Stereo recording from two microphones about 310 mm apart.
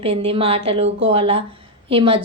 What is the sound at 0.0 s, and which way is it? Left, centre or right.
A woman's voice, centre.